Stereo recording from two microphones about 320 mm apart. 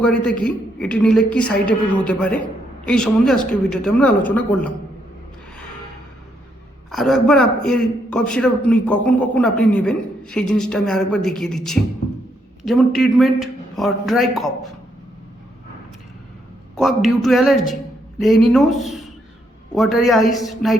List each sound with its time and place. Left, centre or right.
0.0 s a man's voice: centre
6.9 s a man's voice: centre
16.7 s a man's voice: centre